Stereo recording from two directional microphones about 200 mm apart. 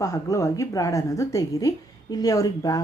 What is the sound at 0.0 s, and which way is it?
Speech, 15° left (ahead or behind).